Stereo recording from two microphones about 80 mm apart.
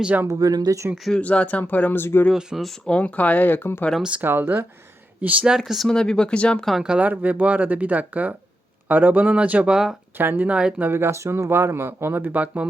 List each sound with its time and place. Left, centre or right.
0.0 s speech: centre
0.3 s speech: right
1.2 s speech: centre
2.3 s speech: centre
2.6 s speech: centre
2.9 s speech: centre
4.2 s speech: right
5.5 s speech: centre
5.9 s speech: centre
6.7 s speech: centre
10.2 s speech: right
10.8 s speech: right